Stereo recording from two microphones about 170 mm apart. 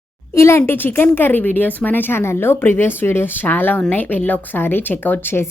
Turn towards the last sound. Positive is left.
turn(degrees=10)  # may be behind; listen again after turning